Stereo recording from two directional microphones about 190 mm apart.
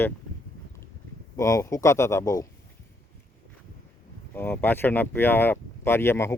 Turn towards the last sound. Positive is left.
turn(degrees=15)  # may be behind; listen again after turning